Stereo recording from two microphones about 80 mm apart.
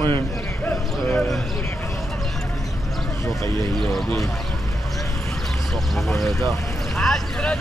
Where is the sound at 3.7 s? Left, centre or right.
Centre.